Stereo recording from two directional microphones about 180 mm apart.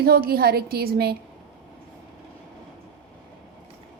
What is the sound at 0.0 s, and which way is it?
A woman's voice, 60° right (ahead or behind).